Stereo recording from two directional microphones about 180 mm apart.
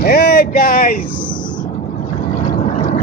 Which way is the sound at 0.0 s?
55° left (ahead or behind).